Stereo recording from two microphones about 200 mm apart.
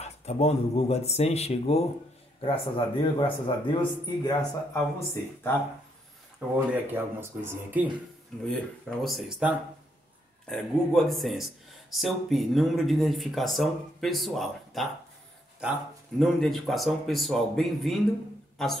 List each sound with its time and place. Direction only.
0.0 s speech: 35° left (ahead or behind); by 5.6 s 10° left (ahead or behind)
6.7 s speech: 10° right (ahead or behind)
9.0 s speech: centre (ahead or behind)